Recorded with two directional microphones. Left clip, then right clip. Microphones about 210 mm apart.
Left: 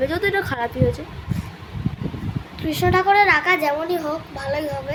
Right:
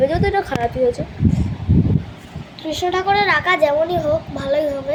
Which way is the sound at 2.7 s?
20° left (ahead or behind).